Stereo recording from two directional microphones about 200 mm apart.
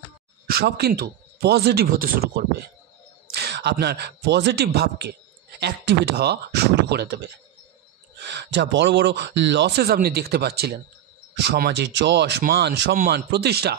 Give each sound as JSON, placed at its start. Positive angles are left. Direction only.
{"t": 0.5, "sound": "a man's voice", "side_deg": -55}
{"t": 8.2, "sound": "speech", "side_deg": -60}